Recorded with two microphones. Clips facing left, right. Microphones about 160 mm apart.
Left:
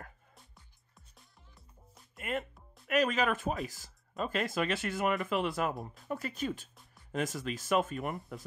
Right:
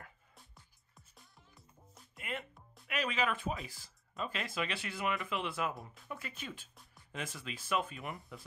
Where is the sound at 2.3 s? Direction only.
45° left (ahead or behind).